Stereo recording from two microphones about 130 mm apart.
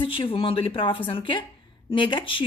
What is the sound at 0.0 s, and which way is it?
A woman's voice, 45° left (ahead or behind).